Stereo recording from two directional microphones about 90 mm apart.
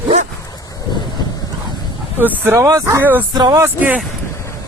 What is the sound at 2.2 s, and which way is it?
Speech, 20° right (ahead or behind).